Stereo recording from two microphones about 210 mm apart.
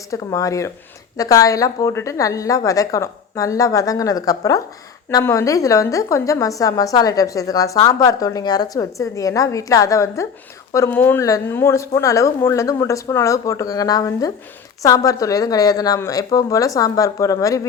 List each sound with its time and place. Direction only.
0.1 s a woman's voice: 15° left (ahead or behind)